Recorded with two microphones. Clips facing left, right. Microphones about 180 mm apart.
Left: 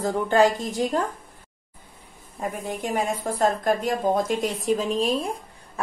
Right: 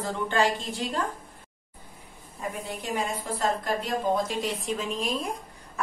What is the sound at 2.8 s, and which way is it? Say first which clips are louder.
Speech: left 5 dB; 50° left (ahead or behind).